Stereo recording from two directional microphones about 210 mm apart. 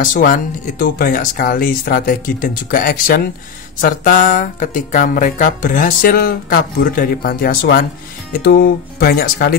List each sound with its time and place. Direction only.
0.0 s speech: 40° left (ahead or behind)